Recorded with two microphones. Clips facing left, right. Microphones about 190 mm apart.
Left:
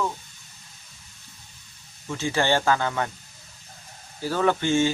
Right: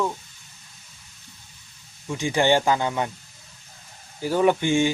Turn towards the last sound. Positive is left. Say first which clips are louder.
# right 2 dB
turn(degrees=-15)  # may be behind; listen again after turning